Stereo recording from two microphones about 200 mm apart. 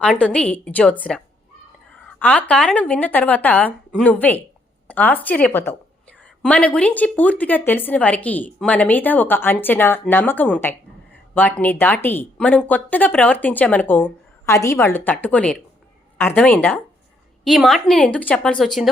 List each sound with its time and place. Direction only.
0.0 s a woman's voice: 5° left (ahead or behind)
2.0 s a woman's voice: 5° left (ahead or behind)